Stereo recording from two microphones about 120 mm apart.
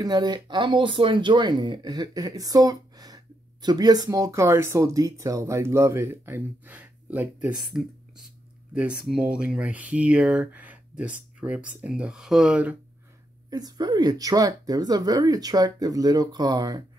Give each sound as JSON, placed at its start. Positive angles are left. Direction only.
{"t": 0.0, "sound": "speech", "side_deg": -35}
{"t": 13.5, "sound": "speech", "side_deg": -35}